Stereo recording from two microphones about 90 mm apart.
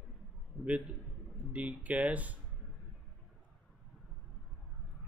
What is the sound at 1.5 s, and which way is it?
Speech, 15° right (ahead or behind).